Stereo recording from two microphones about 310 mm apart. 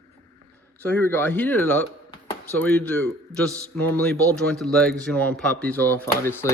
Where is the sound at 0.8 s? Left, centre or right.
Centre.